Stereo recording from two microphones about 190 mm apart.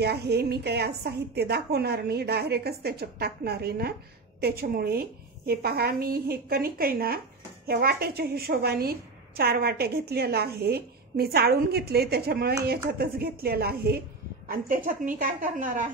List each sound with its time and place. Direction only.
0.0 s a woman's voice: 60° right (ahead or behind)